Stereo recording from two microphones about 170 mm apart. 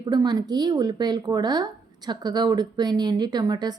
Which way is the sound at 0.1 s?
25° right (ahead or behind).